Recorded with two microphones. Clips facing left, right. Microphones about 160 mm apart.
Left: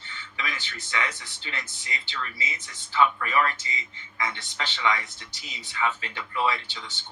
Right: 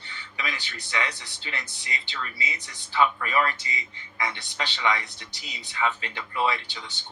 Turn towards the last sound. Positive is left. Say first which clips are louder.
# even
turn(degrees=-20)  # may be behind; listen again after turning